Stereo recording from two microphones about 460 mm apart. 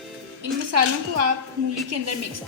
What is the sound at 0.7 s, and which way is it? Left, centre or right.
Speech, right.